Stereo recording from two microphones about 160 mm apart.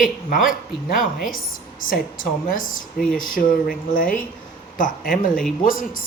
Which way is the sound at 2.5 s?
60° left (ahead or behind).